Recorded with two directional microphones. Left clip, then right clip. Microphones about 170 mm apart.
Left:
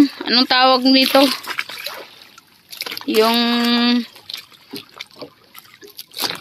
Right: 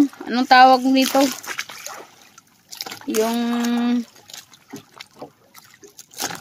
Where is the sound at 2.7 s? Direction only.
55° right (ahead or behind).